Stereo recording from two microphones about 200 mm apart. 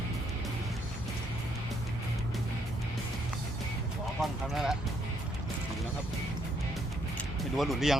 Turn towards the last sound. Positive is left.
turn(degrees=0)  # may be behind; listen again after turning